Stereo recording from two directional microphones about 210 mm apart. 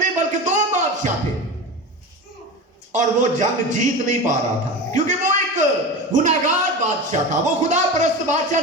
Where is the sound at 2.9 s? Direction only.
35° right (ahead or behind).